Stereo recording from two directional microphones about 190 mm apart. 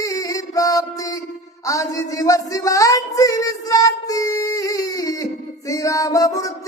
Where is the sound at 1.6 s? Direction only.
15° left (ahead or behind).